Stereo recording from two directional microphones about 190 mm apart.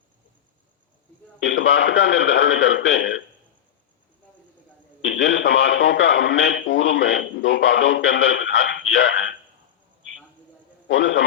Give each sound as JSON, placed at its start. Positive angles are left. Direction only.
{"t": 1.4, "sound": "a man's voice", "side_deg": 70}
{"t": 5.0, "sound": "a man's voice", "side_deg": 70}
{"t": 10.8, "sound": "a man's voice", "side_deg": 75}